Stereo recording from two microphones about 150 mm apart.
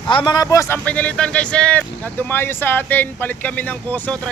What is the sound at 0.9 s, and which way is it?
Speech, 10° left (ahead or behind).